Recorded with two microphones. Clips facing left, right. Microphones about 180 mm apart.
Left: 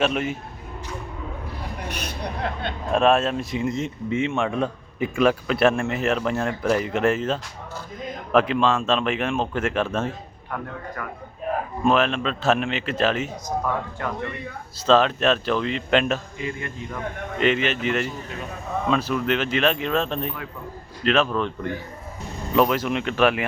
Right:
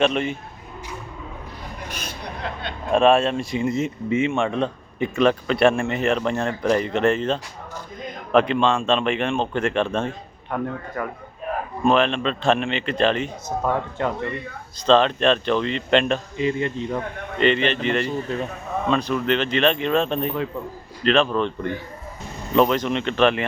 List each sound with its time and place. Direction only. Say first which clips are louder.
0.0 s speech: right 2 dB; 5° left (ahead or behind)
2.0 s vehicle: left 3 dB; 50° left (ahead or behind)
2.9 s speech: right 2 dB; centre (ahead or behind)
11.0 s speech: right 7 dB; 25° right (ahead or behind)
11.8 s speech: right 2 dB; 5° left (ahead or behind)
14.0 s speech: right 5 dB; 25° right (ahead or behind)
14.8 s speech: right 1 dB; 5° left (ahead or behind)
16.4 s speech: right 8 dB; 25° right (ahead or behind)
17.3 s speech: right 2 dB; 5° left (ahead or behind)